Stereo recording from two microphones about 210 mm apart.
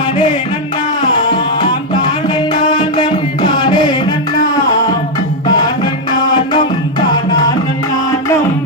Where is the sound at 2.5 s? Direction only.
20° left (ahead or behind).